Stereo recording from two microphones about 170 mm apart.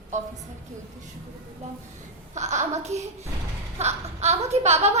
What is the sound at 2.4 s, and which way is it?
A woman's voice, 45° right (ahead or behind).